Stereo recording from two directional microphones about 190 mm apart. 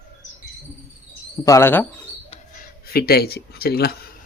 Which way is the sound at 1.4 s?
15° left (ahead or behind).